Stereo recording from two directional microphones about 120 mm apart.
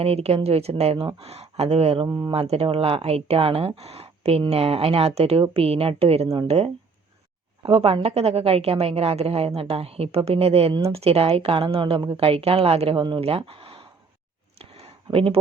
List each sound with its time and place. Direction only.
0.0 s speech: 55° right (ahead or behind)
2.0 s speech: 35° right (ahead or behind)
2.3 s speech: 55° right (ahead or behind)
7.6 s a woman's voice: 55° right (ahead or behind)
15.1 s a woman's voice: 50° right (ahead or behind)